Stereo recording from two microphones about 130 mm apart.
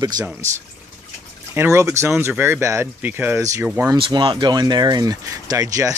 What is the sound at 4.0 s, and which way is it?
Speech, 35° right (ahead or behind).